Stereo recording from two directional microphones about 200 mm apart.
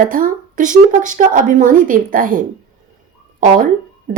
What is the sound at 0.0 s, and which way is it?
Speech, 40° right (ahead or behind).